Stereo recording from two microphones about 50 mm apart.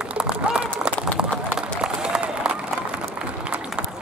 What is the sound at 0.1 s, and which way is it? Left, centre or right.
Run, right.